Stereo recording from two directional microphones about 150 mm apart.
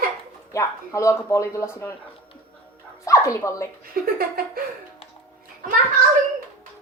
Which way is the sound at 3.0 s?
20° left (ahead or behind).